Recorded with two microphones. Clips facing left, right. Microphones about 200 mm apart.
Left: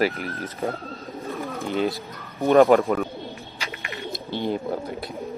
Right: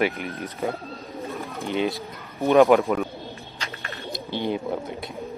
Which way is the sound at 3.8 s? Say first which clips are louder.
Left 3 dB; 15° left (ahead or behind).